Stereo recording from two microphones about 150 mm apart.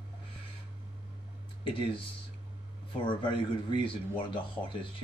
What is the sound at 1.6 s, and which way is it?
Speech, 35° left (ahead or behind).